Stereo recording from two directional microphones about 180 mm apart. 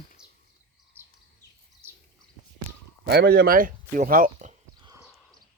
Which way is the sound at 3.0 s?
65° right (ahead or behind).